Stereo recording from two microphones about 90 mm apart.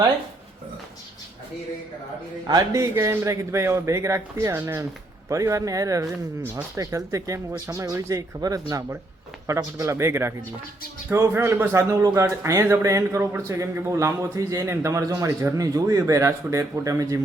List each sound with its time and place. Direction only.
2.5 s a man's voice: 35° right (ahead or behind)
15.5 s a man's voice: 40° right (ahead or behind)